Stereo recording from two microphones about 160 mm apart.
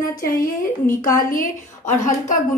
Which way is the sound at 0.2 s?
60° left (ahead or behind).